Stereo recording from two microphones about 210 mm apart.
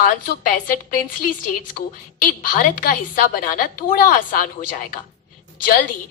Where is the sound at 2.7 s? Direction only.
40° left (ahead or behind).